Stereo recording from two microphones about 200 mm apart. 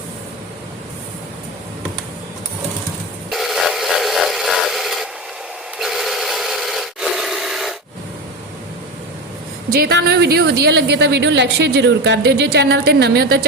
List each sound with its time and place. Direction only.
3.2 s wood: centre (ahead or behind)
5.8 s filing: centre (ahead or behind)
9.7 s a woman's voice: 50° right (ahead or behind)